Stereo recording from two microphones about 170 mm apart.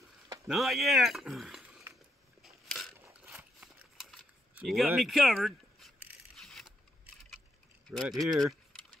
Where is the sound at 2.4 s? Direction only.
Centre (ahead or behind).